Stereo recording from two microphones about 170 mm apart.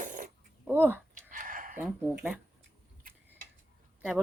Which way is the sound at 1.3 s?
50° right (ahead or behind).